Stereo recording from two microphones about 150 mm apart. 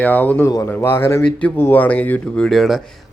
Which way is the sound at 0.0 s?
10° left (ahead or behind).